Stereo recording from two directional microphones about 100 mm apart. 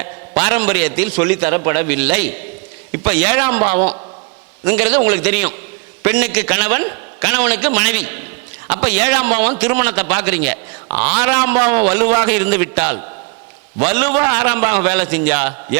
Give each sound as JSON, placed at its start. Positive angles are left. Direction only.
{"t": 0.0, "sound": "a man's voice", "side_deg": -20}